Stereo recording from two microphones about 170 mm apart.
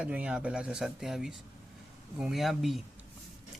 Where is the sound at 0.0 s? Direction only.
5° right (ahead or behind).